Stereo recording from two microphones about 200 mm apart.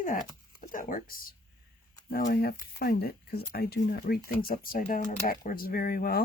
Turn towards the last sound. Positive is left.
turn(degrees=45)  # may be behind; listen again after turning